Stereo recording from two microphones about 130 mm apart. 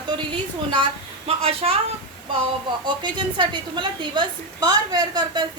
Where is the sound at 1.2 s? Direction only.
50° right (ahead or behind).